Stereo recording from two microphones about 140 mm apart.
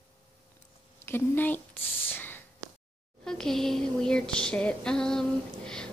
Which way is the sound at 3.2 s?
5° left (ahead or behind).